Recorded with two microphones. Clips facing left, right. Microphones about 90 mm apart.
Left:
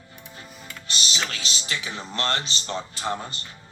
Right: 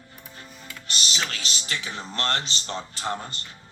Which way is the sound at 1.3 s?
50° right (ahead or behind).